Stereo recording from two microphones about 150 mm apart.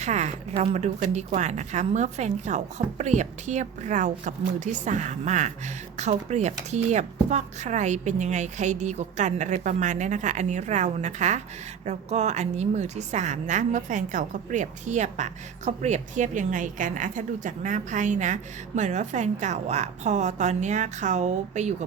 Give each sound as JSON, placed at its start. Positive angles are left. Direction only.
{"t": 0.0, "sound": "a woman's voice", "side_deg": -50}